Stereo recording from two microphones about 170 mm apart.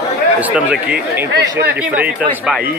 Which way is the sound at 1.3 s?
75° right (ahead or behind).